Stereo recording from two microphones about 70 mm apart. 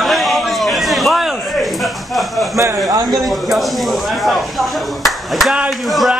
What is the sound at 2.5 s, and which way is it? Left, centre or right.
Speech, right.